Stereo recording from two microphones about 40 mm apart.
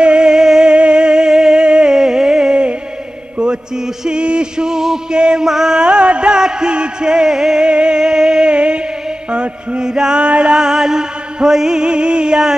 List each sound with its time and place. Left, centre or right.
0.0 s music: right
3.3 s mantra: right
3.8 s mantra: centre
4.2 s music: right